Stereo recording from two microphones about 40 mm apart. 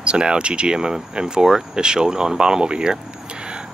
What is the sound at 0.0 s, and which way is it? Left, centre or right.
Speech, right.